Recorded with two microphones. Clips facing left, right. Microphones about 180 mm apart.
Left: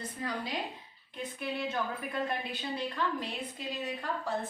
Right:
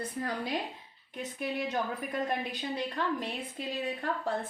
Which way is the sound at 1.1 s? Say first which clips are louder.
Right 2 dB; 45° right (ahead or behind).